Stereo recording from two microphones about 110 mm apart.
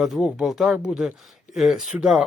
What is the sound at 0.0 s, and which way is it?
Speech, 5° right (ahead or behind).